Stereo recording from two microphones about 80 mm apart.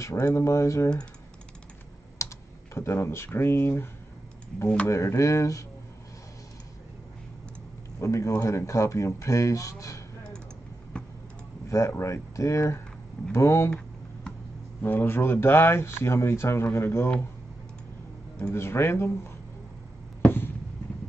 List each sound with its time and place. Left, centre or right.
0.0 s speech: left
2.1 s speech: left
8.0 s speech: left
10.9 s vehicle: centre
11.7 s speech: left
14.8 s speech: left
18.4 s speech: left
20.2 s fireworks: left